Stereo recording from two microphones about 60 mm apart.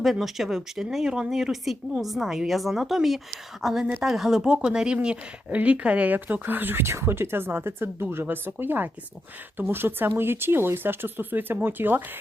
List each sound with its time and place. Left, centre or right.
0.0 s speech: centre; by 12.0 s right